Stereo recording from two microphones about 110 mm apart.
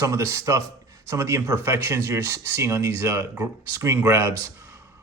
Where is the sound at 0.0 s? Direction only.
30° right (ahead or behind).